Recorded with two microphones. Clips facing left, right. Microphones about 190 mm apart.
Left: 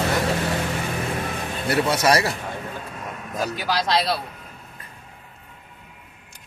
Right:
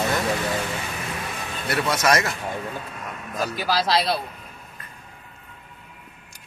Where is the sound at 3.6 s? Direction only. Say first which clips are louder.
Right 1 dB; 5° right (ahead or behind).